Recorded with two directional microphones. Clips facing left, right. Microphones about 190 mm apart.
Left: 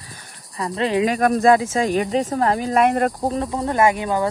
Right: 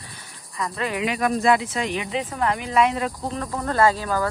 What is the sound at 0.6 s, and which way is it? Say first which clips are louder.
Speech: left 6 dB; 30° left (ahead or behind).